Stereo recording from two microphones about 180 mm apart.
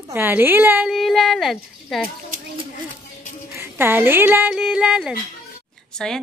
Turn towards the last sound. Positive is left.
turn(degrees=5)  # may be behind; listen again after turning